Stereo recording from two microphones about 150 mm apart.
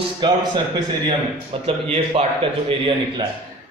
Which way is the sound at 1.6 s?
40° right (ahead or behind).